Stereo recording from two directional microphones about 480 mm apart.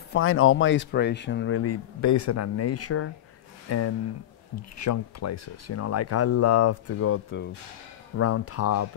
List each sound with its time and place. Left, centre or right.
0.1 s speech: left